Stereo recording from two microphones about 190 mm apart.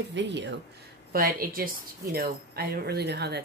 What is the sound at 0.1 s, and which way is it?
Speech, 70° right (ahead or behind).